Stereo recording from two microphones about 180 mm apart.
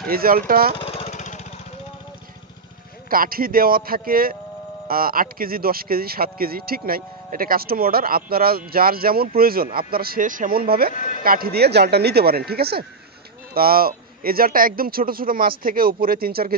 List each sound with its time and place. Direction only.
0.1 s speech: 55° right (ahead or behind)
0.7 s vehicle: 35° left (ahead or behind)
3.1 s speech: 55° right (ahead or behind)
11.0 s speech: 45° left (ahead or behind)
11.2 s speech: 55° right (ahead or behind)